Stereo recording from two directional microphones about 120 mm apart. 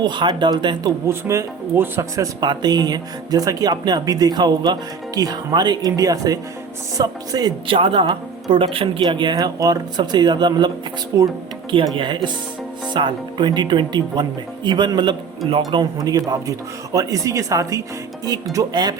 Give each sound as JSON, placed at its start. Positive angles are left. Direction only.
{"t": 0.0, "sound": "speech", "side_deg": -40}
{"t": 1.0, "sound": "speech", "side_deg": -25}
{"t": 7.7, "sound": "speech", "side_deg": -45}
{"t": 11.1, "sound": "speech", "side_deg": -25}
{"t": 11.9, "sound": "speech", "side_deg": -40}